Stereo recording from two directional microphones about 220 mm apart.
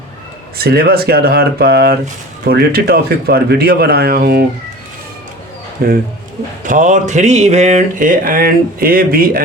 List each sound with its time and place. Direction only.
0.6 s speech: 45° right (ahead or behind)
5.8 s speech: 45° right (ahead or behind)